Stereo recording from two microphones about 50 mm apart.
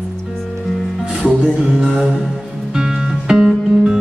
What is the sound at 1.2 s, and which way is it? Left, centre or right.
Music, centre.